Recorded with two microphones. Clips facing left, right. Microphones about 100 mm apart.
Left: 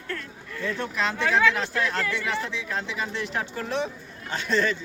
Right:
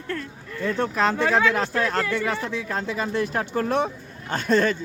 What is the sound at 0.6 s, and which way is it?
A man's voice, 40° right (ahead or behind).